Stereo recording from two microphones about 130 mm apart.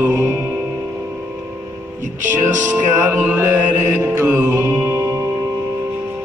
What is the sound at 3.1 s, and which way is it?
Music, 20° right (ahead or behind).